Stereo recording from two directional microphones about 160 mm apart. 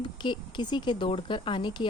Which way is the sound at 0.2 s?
30° left (ahead or behind).